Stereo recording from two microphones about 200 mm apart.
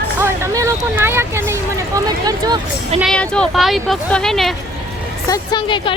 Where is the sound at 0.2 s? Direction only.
15° right (ahead or behind).